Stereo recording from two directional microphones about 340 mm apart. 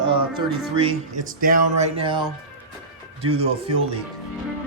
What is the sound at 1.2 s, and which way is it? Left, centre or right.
Speech, right.